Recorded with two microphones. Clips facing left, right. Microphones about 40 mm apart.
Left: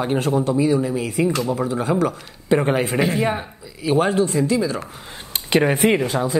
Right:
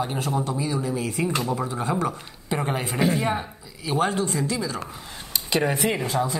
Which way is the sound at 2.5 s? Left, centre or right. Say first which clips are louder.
Left 9 dB; left.